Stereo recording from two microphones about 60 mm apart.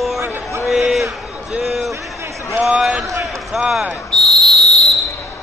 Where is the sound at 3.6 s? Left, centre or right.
Centre.